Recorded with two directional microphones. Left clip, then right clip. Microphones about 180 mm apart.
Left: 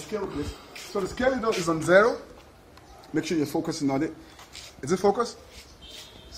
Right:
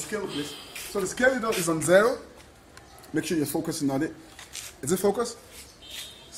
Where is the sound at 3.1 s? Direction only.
35° right (ahead or behind).